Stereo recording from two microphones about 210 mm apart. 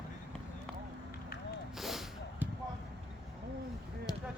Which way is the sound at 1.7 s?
Centre (ahead or behind).